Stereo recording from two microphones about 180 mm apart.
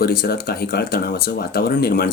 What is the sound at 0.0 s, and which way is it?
Speech, 55° left (ahead or behind).